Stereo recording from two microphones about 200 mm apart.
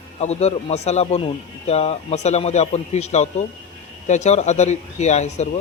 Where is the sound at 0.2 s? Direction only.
35° left (ahead or behind).